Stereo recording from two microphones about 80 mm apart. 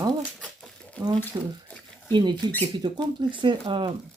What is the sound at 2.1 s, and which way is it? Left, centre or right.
Speech, right.